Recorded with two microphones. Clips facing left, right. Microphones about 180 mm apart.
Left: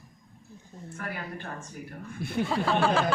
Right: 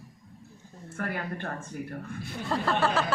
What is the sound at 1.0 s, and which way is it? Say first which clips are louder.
Speech: right 4 dB; 55° right (ahead or behind).